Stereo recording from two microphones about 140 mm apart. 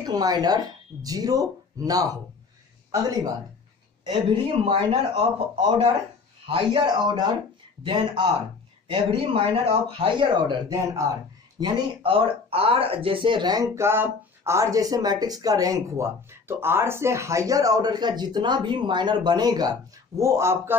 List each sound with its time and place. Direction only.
0.0 s speech: 30° right (ahead or behind)
4.0 s speech: 35° right (ahead or behind)
6.4 s speech: 40° right (ahead or behind)
11.6 s speech: 40° right (ahead or behind); by 20.7 s 20° right (ahead or behind)